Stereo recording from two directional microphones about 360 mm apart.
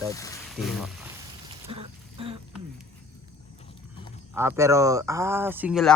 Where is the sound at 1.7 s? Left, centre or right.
Centre.